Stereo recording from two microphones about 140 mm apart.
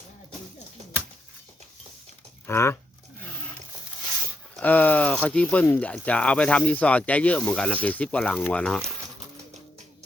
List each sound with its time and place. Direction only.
2.5 s speech: 15° left (ahead or behind)
4.6 s speech: 10° left (ahead or behind)